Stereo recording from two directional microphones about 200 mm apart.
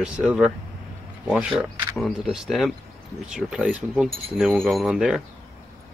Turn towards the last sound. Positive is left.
turn(degrees=0)  # may be behind; listen again after turning